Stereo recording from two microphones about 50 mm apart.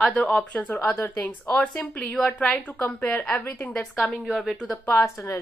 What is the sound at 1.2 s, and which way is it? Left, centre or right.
Speech, left.